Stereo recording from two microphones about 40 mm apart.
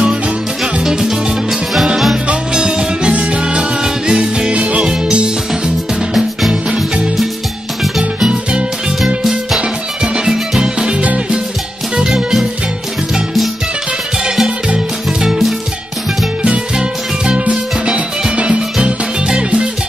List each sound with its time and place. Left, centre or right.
0.8 s music: centre
2.2 s music: centre
8.3 s music: right
15.1 s music: centre
16.4 s music: right